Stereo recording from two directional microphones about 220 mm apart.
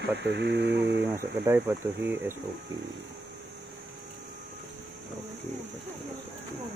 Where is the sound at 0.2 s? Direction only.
50° right (ahead or behind).